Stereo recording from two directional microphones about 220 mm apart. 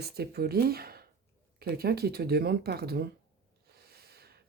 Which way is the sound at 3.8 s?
45° right (ahead or behind).